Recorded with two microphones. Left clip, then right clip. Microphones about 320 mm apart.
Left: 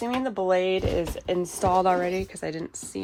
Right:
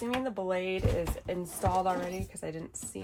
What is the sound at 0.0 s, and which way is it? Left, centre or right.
Speech, left.